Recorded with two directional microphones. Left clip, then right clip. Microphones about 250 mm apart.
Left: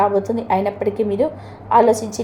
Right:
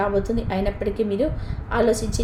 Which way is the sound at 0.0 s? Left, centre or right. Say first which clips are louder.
Left 5 dB; centre.